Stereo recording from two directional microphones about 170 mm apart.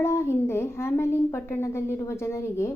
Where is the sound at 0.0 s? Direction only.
15° left (ahead or behind).